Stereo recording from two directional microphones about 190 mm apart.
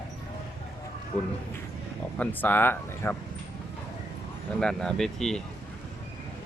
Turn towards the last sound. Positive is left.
turn(degrees=0)  # may be behind; listen again after turning